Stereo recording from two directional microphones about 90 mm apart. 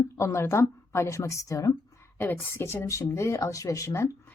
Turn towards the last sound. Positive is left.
turn(degrees=35)  # may be behind; listen again after turning